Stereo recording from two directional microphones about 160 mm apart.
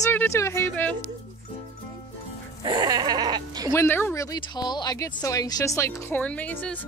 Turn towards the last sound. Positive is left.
turn(degrees=10)  # may be behind; listen again after turning